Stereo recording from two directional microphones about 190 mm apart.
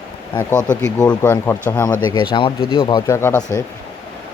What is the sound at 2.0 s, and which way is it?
Speech, 25° left (ahead or behind).